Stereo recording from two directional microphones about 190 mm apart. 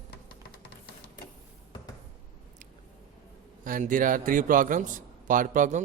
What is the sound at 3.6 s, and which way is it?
A man's voice, 45° right (ahead or behind).